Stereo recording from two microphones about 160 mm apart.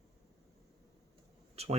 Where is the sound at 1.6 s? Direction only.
40° right (ahead or behind).